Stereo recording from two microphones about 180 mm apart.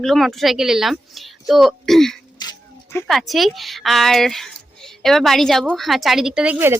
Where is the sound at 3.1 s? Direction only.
Centre (ahead or behind).